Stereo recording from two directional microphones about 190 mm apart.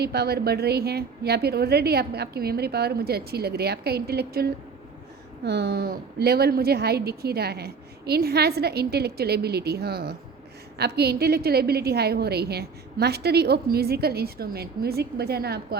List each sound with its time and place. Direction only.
0.0 s a woman's voice: 55° right (ahead or behind)